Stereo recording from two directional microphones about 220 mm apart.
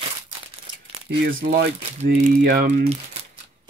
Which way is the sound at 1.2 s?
45° right (ahead or behind).